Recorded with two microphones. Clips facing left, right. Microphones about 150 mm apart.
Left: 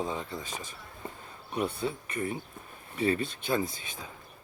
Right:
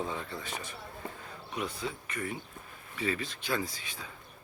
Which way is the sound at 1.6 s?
35° left (ahead or behind).